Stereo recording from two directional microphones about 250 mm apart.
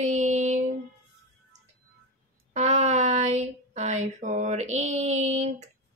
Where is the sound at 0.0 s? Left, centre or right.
Right.